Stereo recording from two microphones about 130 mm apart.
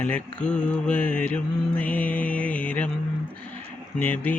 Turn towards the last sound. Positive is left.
turn(degrees=10)  # may be behind; listen again after turning